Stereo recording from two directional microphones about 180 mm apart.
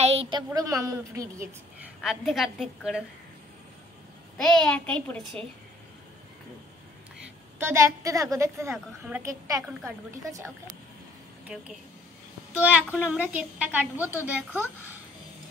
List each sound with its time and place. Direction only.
0.0 s a sound: 35° right (ahead or behind)
0.5 s a woman's voice: 20° right (ahead or behind)
2.0 s a woman's voice: centre (ahead or behind)
4.4 s a woman's voice: 5° left (ahead or behind)
7.5 s a woman's voice: 15° right (ahead or behind)
11.4 s speech: 5° right (ahead or behind)
12.9 s a woman's voice: 5° right (ahead or behind)